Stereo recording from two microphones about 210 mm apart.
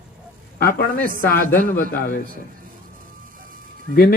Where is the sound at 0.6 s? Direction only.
45° left (ahead or behind).